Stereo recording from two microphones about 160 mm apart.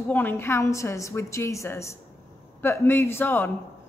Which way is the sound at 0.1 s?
15° left (ahead or behind).